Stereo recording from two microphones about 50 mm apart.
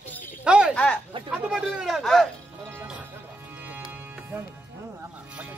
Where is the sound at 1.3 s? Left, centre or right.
Centre.